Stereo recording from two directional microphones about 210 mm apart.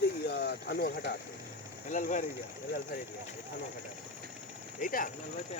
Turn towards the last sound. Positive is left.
turn(degrees=40)  # may be behind; listen again after turning